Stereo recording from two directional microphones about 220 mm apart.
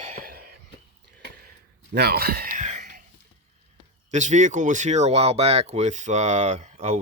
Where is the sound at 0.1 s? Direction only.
40° right (ahead or behind).